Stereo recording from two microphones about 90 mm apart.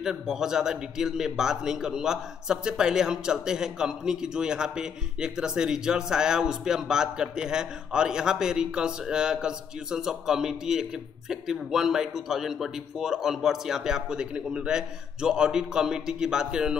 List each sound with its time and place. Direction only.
0.0 s a man's voice: 5° right (ahead or behind)